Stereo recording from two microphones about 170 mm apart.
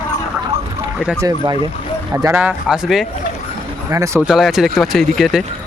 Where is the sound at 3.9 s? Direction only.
20° right (ahead or behind).